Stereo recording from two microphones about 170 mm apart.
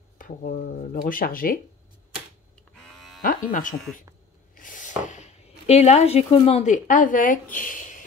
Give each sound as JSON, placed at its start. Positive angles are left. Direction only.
{"t": 0.2, "sound": "speech", "side_deg": 55}
{"t": 2.8, "sound": "electric shaver", "side_deg": 0}
{"t": 3.2, "sound": "speech", "side_deg": 55}
{"t": 7.5, "sound": "a sound", "side_deg": 50}